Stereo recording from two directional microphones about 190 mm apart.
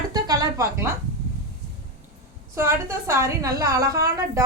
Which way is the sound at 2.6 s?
15° right (ahead or behind).